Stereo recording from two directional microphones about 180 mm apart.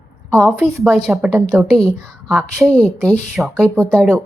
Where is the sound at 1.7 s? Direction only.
5° left (ahead or behind).